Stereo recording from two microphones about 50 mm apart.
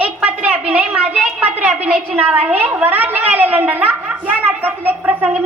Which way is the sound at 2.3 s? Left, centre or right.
Right.